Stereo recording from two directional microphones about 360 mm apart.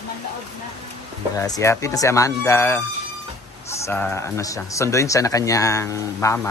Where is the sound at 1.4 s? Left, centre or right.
Centre.